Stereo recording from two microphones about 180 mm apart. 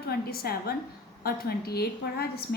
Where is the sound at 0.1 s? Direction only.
60° left (ahead or behind).